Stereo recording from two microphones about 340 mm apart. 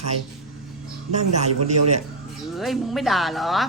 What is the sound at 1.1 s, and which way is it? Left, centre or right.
Speech, centre.